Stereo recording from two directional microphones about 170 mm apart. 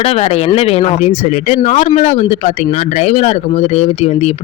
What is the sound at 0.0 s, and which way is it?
Speech, 35° left (ahead or behind).